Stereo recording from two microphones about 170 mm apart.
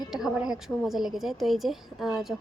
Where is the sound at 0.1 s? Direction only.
5° right (ahead or behind).